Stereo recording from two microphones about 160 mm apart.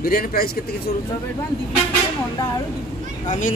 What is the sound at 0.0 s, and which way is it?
Speech, 65° left (ahead or behind).